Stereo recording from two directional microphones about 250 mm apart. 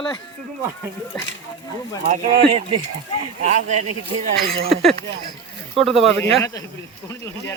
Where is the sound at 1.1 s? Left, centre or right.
Centre.